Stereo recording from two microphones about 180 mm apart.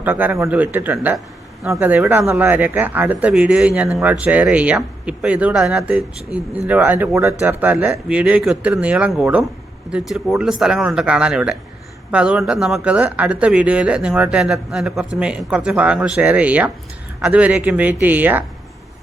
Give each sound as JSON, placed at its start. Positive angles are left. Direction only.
{"t": 0.0, "sound": "speech", "side_deg": -10}